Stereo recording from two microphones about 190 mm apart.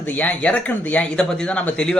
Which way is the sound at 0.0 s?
10° left (ahead or behind).